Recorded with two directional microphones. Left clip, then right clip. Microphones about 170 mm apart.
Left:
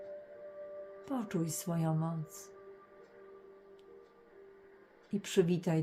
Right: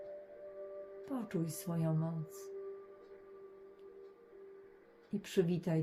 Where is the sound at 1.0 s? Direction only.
25° left (ahead or behind).